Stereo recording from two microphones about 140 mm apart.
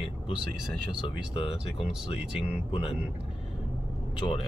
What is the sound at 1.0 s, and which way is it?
Speech, 40° left (ahead or behind).